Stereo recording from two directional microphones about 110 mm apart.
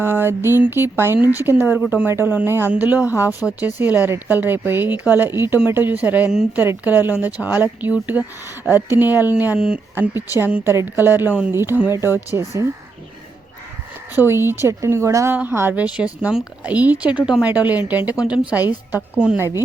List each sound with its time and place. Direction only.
0.0 s speech: 20° right (ahead or behind)
14.2 s speech: 20° right (ahead or behind)
19.4 s speech: 20° right (ahead or behind)